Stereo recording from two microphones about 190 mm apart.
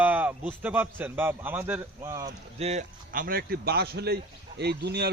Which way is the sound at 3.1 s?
50° right (ahead or behind).